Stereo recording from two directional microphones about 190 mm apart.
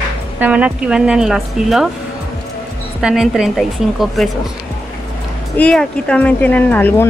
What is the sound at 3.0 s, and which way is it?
Speech, 5° right (ahead or behind).